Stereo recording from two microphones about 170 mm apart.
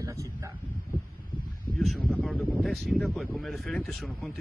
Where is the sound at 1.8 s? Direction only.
Centre (ahead or behind).